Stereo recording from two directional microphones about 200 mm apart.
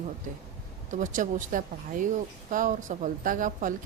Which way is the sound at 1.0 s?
40° right (ahead or behind).